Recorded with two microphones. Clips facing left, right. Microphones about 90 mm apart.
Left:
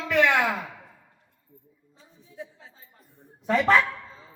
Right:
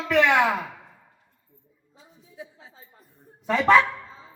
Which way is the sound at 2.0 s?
5° right (ahead or behind).